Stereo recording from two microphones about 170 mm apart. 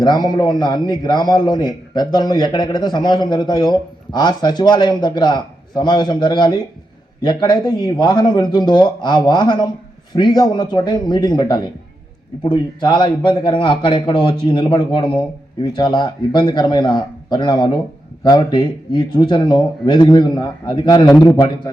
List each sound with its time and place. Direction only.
0.0 s a man's voice: 25° left (ahead or behind)